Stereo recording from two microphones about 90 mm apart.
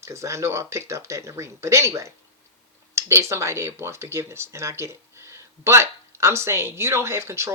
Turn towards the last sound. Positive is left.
turn(degrees=-30)  # may be behind; listen again after turning